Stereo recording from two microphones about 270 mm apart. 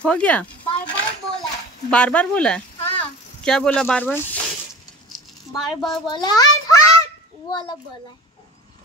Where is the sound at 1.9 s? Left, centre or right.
Centre.